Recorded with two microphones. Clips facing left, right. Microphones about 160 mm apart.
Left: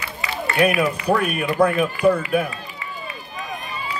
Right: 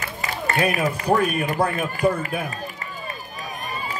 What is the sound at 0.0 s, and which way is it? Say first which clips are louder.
A man's voice: even; 45° right (ahead or behind).